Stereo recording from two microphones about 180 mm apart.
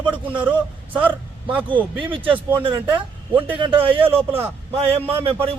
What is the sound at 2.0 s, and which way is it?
Speech, 30° right (ahead or behind).